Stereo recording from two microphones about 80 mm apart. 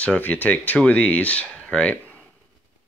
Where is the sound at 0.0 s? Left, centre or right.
Centre.